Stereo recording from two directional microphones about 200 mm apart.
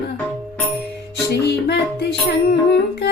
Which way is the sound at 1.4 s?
55° left (ahead or behind).